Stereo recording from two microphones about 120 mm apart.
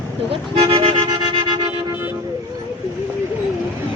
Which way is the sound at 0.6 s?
50° right (ahead or behind).